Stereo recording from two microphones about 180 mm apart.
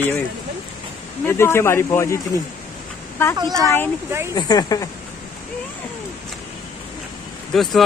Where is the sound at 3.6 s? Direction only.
10° left (ahead or behind).